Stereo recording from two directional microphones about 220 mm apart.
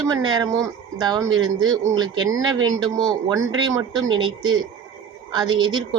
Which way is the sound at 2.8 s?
Centre (ahead or behind).